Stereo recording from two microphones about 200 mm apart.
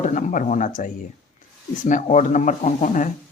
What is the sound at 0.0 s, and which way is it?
Speech, 40° left (ahead or behind).